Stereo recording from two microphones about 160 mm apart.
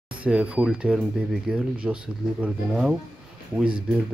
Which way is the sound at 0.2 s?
5° right (ahead or behind).